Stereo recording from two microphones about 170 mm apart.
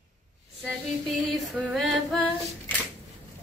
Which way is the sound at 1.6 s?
5° right (ahead or behind).